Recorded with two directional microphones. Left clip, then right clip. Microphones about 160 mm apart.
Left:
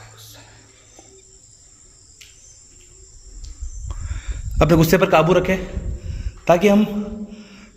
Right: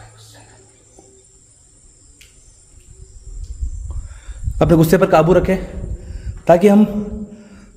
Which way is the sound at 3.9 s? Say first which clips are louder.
Left 8 dB; 10° right (ahead or behind).